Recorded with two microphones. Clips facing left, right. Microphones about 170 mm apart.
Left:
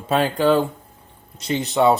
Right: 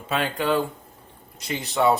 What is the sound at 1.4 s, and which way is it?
Speech, 25° left (ahead or behind).